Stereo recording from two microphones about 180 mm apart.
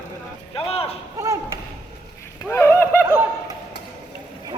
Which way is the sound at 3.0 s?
10° right (ahead or behind).